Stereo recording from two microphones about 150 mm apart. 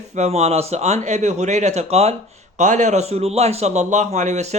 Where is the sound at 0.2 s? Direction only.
45° right (ahead or behind).